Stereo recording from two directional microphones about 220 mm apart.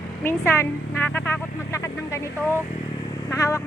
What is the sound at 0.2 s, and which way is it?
A woman's voice, 10° left (ahead or behind).